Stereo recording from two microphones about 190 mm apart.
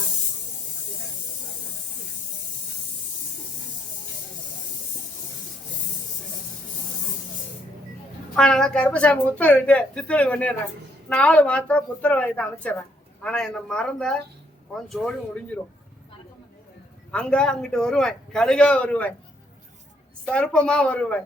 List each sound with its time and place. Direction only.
8.4 s a woman's voice: 5° left (ahead or behind)
17.1 s a man's voice: 5° left (ahead or behind)
20.2 s a man's voice: 5° left (ahead or behind)